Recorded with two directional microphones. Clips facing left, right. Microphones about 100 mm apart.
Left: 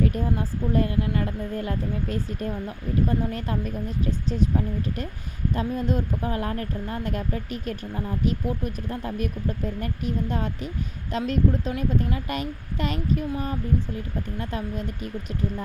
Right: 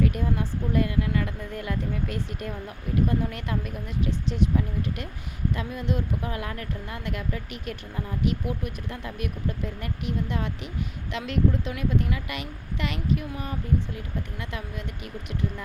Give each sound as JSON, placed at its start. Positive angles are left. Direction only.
{"t": 0.0, "sound": "speech", "side_deg": 35}